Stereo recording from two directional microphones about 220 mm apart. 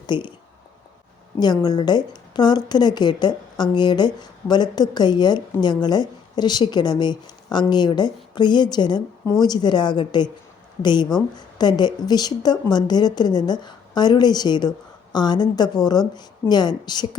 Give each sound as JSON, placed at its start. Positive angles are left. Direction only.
{"t": 0.1, "sound": "a woman's voice", "side_deg": 20}
{"t": 1.4, "sound": "a woman's voice", "side_deg": 20}